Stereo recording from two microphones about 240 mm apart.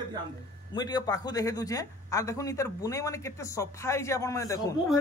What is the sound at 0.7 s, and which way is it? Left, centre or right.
Speech, centre.